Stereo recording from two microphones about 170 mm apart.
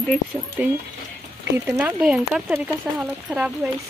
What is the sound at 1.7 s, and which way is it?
Speech, 10° right (ahead or behind).